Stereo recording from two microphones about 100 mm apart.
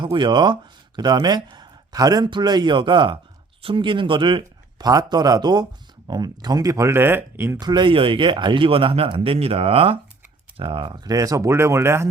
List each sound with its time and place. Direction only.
0.0 s speech: 55° right (ahead or behind)
4.9 s speech: 40° right (ahead or behind); by 7.6 s 25° right (ahead or behind)
7.6 s speech: 45° right (ahead or behind); by 12.0 s 25° right (ahead or behind)